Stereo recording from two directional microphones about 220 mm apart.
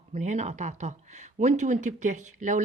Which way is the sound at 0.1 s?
30° right (ahead or behind).